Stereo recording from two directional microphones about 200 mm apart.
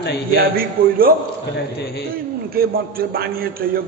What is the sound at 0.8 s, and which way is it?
Speech, 45° right (ahead or behind).